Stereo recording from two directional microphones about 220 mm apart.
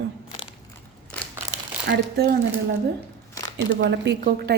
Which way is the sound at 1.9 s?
45° right (ahead or behind).